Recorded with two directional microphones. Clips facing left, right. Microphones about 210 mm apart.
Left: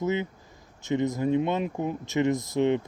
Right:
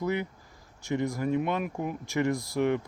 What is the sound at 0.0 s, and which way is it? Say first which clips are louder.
Speech: left 2 dB; 20° left (ahead or behind).